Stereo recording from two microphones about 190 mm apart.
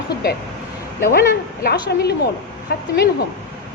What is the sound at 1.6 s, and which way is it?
Speech, 55° left (ahead or behind).